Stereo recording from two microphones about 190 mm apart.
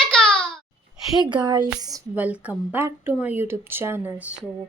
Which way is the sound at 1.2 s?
25° right (ahead or behind).